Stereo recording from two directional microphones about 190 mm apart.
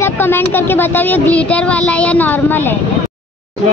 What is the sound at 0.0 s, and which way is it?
Speech, 10° left (ahead or behind).